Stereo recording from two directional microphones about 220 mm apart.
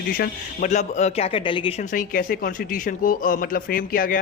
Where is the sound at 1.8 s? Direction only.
35° left (ahead or behind).